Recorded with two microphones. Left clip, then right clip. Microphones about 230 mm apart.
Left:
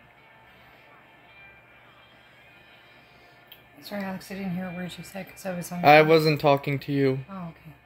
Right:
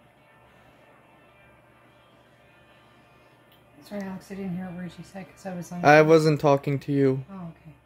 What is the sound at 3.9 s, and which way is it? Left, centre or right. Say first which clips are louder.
Speech: left 2 dB; left.